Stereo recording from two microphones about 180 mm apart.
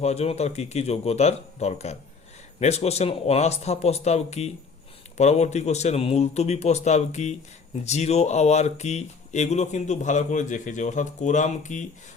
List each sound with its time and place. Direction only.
0.0 s speech: 35° left (ahead or behind)